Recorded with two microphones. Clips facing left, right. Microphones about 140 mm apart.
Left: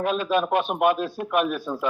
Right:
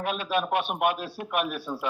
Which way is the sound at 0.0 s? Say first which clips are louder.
Left 5 dB; 40° left (ahead or behind).